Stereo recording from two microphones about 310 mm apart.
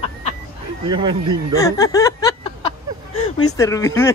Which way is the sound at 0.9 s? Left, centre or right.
Centre.